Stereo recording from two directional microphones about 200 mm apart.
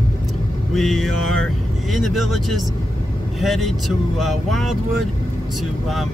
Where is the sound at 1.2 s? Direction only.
90° right.